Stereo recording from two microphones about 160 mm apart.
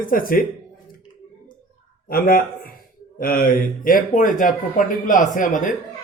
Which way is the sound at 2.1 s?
65° left (ahead or behind).